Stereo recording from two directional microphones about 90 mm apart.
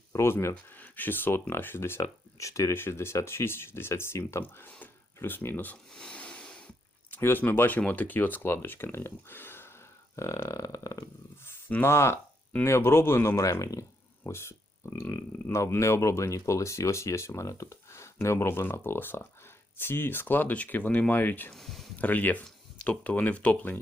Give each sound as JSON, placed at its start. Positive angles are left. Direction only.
{"t": 0.1, "sound": "speech", "side_deg": 30}
{"t": 5.9, "sound": "a sound", "side_deg": 10}
{"t": 7.1, "sound": "speech", "side_deg": 25}
{"t": 11.7, "sound": "speech", "side_deg": 25}
{"t": 21.5, "sound": "speech", "side_deg": 0}
{"t": 21.9, "sound": "speech", "side_deg": 20}